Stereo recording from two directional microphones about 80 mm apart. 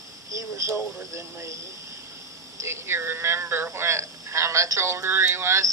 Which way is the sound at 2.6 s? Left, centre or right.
Right.